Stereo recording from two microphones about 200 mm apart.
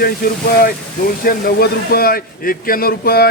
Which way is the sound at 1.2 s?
45° left (ahead or behind).